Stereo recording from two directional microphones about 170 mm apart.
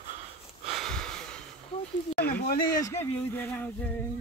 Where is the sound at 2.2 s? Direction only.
70° left (ahead or behind).